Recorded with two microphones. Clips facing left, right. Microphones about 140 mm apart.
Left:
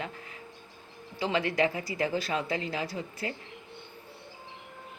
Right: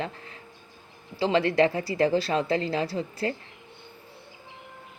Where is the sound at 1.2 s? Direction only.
35° right (ahead or behind).